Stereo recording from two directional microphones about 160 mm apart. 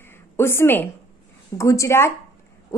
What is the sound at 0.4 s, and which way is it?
A woman's voice, 15° left (ahead or behind).